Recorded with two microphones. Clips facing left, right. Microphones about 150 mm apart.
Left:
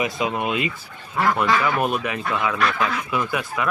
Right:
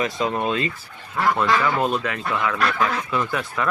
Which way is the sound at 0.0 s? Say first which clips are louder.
Right 1 dB; 10° left (ahead or behind).